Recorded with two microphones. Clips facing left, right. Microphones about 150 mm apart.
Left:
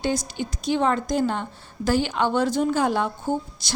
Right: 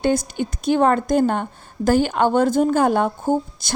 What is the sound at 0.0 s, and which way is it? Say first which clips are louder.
A woman's voice: right 6 dB; 55° right (ahead or behind).